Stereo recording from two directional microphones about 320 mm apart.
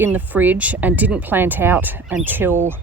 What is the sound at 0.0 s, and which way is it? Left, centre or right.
Speech, centre.